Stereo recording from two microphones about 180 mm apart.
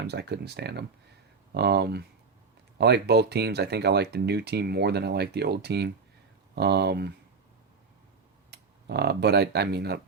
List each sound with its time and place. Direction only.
0.1 s speech: 65° right (ahead or behind)
8.4 s speech: 65° right (ahead or behind)